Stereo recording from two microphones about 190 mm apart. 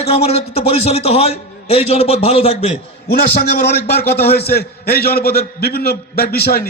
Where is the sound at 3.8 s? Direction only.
55° left (ahead or behind).